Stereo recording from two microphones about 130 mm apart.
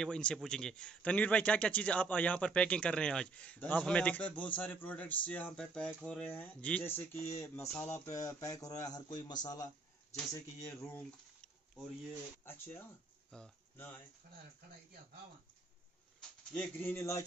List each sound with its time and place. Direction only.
0.0 s a man's voice: 5° left (ahead or behind); by 11.0 s 25° left (ahead or behind)
11.0 s a sound: 5° left (ahead or behind)
12.4 s a man's voice: 15° left (ahead or behind)
16.2 s speech: 10° left (ahead or behind)